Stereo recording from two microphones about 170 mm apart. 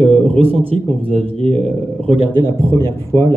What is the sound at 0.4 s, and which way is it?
Speech, 35° right (ahead or behind).